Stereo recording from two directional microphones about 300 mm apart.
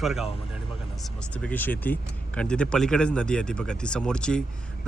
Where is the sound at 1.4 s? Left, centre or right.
Centre.